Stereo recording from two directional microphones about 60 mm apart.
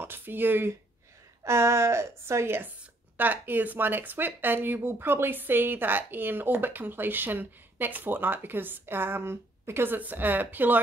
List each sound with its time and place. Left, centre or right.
0.0 s speech: right
1.4 s a woman's voice: right
3.2 s speech: right
9.9 s speech: right